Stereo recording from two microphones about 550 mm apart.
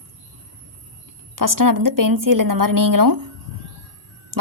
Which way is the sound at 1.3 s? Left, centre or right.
Right.